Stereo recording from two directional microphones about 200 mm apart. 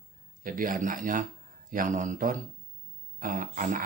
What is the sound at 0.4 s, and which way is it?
Speech, 45° right (ahead or behind).